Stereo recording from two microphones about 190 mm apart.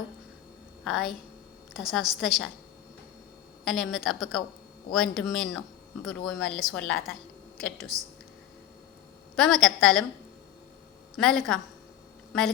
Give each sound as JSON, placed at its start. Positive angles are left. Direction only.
{"t": 0.9, "sound": "speech", "side_deg": 0}
{"t": 3.6, "sound": "speech", "side_deg": 0}
{"t": 7.9, "sound": "speech", "side_deg": -20}
{"t": 9.3, "sound": "speech", "side_deg": 0}
{"t": 11.2, "sound": "speech", "side_deg": 0}